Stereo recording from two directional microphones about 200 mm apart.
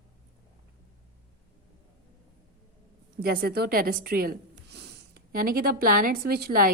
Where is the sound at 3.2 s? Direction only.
50° right (ahead or behind).